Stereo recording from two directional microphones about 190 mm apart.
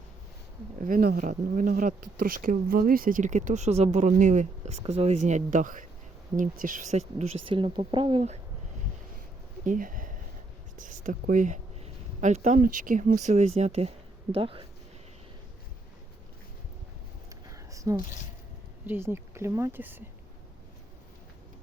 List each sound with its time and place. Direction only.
0.9 s speech: 50° right (ahead or behind); by 8.4 s 30° right (ahead or behind)
9.6 s speech: 45° right (ahead or behind); by 14.7 s 30° right (ahead or behind)
17.4 s a sound: 15° right (ahead or behind)
18.9 s speech: 15° right (ahead or behind)